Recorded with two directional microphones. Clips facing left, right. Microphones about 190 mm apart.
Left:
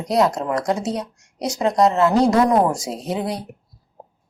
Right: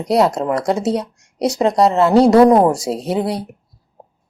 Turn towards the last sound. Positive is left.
turn(degrees=-35)  # may be behind; listen again after turning